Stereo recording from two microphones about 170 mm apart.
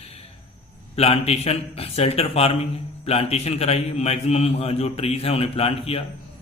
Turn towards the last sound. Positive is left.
turn(degrees=35)  # may be behind; listen again after turning